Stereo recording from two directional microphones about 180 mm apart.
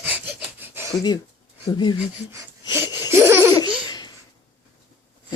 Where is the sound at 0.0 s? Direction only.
10° right (ahead or behind).